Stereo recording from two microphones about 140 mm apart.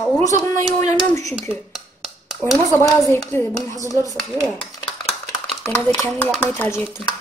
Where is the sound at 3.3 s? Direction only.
15° left (ahead or behind).